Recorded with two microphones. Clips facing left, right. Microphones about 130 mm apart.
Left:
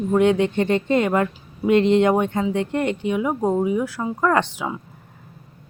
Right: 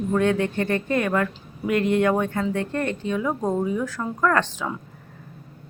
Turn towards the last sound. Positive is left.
turn(degrees=10)  # may be behind; listen again after turning